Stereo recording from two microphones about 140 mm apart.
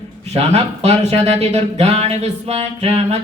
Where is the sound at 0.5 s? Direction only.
50° right (ahead or behind).